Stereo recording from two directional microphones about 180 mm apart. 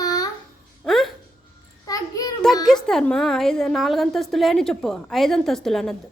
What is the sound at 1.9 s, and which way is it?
Child singing, 20° left (ahead or behind).